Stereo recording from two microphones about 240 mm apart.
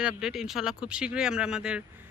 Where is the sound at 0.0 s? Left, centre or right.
Centre.